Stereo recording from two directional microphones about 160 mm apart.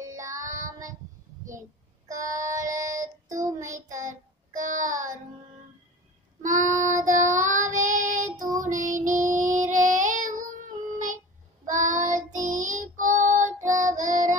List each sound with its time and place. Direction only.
0.0 s child singing: 20° right (ahead or behind)
2.0 s child singing: 20° right (ahead or behind)
3.9 s child singing: 55° right (ahead or behind)
6.4 s child singing: 55° right (ahead or behind)
8.3 s child singing: 20° right (ahead or behind)
8.8 s child singing: 50° right (ahead or behind)
13.7 s music: 50° right (ahead or behind)